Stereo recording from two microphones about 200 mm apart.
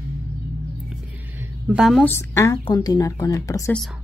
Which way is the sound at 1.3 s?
10° right (ahead or behind).